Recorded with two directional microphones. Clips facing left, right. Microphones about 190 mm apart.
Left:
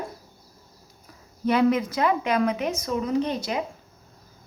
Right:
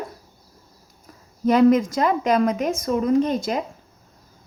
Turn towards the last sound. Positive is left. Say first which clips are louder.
# right 5 dB
turn(degrees=-45)  # may be behind; listen again after turning